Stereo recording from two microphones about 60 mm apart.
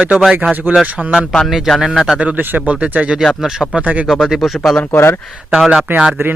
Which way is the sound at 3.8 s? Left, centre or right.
Right.